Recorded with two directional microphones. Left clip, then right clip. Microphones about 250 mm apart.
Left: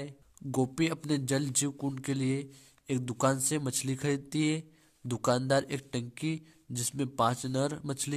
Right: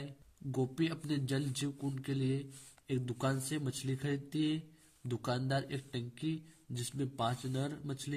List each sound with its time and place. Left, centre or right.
0.0 s speech: left